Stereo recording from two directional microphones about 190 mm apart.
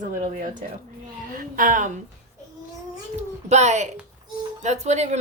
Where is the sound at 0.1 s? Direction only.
45° right (ahead or behind).